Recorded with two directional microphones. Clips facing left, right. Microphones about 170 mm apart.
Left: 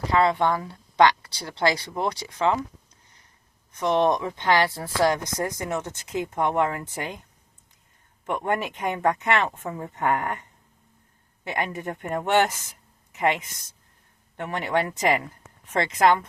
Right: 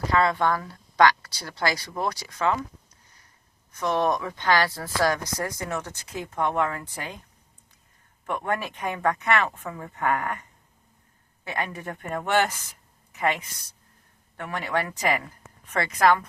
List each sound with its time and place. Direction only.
0.1 s speech: 25° left (ahead or behind)
3.7 s speech: 20° left (ahead or behind)
8.3 s speech: 15° left (ahead or behind)
11.4 s speech: 20° left (ahead or behind)